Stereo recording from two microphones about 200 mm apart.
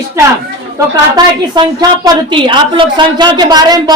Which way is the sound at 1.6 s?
20° right (ahead or behind).